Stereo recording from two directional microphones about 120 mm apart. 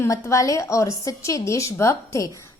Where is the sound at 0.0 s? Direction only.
25° left (ahead or behind).